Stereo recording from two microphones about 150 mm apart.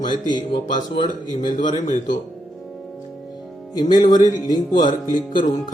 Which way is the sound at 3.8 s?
30° left (ahead or behind).